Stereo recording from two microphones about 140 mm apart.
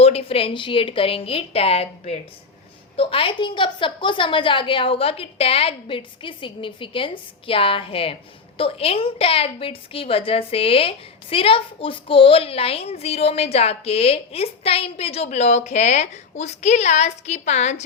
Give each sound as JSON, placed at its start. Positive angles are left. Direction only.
{"t": 0.0, "sound": "a woman's voice", "side_deg": 45}